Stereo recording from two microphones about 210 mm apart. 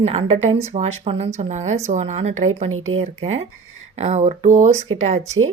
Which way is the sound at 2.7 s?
75° right (ahead or behind).